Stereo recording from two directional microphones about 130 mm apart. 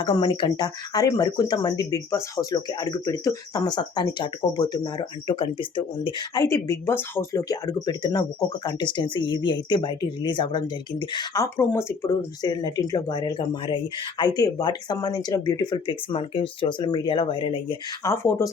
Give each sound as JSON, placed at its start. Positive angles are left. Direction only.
{"t": 0.0, "sound": "speech", "side_deg": 40}
{"t": 4.9, "sound": "speech", "side_deg": 40}
{"t": 6.3, "sound": "speech", "side_deg": 25}
{"t": 11.4, "sound": "speech", "side_deg": 20}
{"t": 18.0, "sound": "speech", "side_deg": 20}